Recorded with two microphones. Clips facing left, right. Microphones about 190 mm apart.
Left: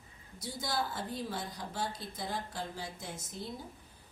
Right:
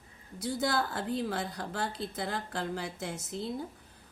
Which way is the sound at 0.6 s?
65° right (ahead or behind).